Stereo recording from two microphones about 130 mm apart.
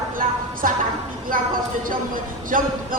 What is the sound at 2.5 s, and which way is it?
Speech, 90° right.